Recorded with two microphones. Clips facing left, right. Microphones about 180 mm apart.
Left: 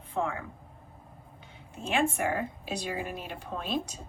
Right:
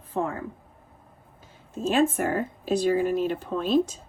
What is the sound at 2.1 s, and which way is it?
Speech, 45° right (ahead or behind).